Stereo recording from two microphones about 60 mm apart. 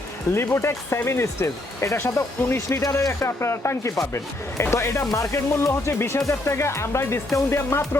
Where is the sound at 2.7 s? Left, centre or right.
Left.